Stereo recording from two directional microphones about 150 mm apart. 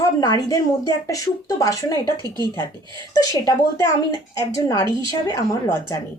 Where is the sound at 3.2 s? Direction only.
25° left (ahead or behind).